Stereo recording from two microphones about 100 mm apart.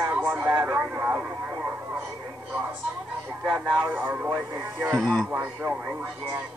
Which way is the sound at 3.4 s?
10° right (ahead or behind).